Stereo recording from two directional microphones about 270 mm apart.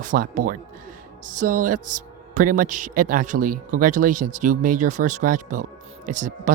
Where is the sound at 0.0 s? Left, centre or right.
Right.